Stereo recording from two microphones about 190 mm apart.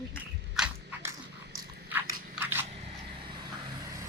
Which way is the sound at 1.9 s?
10° right (ahead or behind).